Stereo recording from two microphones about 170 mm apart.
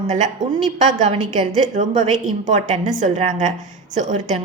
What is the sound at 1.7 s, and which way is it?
A woman's voice, 45° right (ahead or behind).